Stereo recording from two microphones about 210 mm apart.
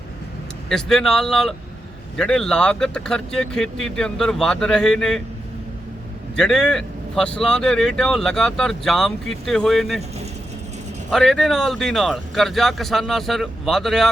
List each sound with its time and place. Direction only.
0.7 s speech: centre (ahead or behind)
6.3 s speech: 5° left (ahead or behind)
11.1 s speech: centre (ahead or behind)